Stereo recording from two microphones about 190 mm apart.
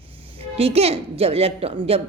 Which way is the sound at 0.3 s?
30° right (ahead or behind).